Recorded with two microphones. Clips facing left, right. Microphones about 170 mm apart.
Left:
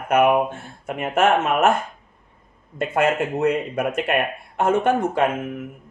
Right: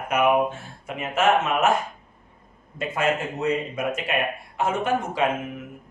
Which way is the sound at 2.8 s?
60° left (ahead or behind).